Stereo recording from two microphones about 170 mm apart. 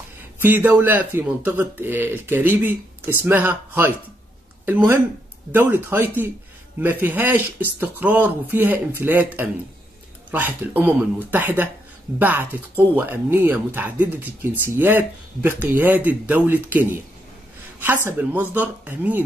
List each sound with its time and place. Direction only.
0.4 s speech: 10° right (ahead or behind)